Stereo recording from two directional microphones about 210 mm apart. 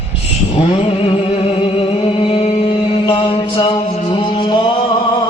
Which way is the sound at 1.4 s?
25° left (ahead or behind).